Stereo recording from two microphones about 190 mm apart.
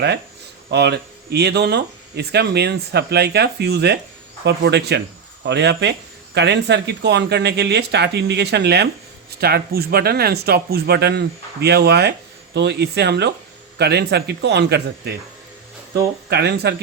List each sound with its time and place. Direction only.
0.7 s speech: 60° right (ahead or behind)
16.3 s speech: 60° right (ahead or behind)